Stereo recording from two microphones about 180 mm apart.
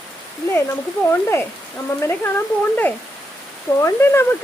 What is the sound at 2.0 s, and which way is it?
Speech, 10° left (ahead or behind).